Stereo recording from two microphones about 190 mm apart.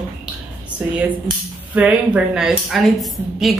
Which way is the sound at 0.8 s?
10° right (ahead or behind).